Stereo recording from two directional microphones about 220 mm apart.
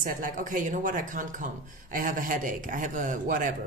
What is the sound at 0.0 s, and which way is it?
Speech, 35° right (ahead or behind).